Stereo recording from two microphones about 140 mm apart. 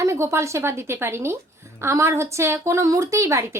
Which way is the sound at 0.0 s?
20° right (ahead or behind).